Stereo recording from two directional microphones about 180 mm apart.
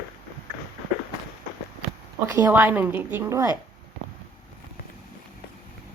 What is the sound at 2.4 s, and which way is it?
A woman's voice, 10° right (ahead or behind).